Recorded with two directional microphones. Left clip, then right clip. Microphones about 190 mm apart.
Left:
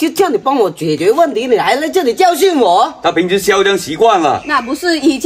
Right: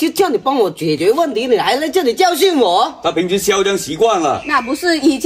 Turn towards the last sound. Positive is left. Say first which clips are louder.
# left 1 dB
turn(degrees=-5)  # may be behind; listen again after turning